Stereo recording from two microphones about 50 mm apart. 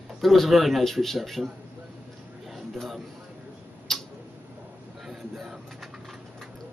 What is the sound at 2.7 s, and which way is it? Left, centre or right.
Speech, centre.